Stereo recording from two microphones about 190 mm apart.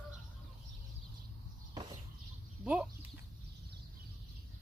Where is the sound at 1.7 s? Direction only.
25° right (ahead or behind).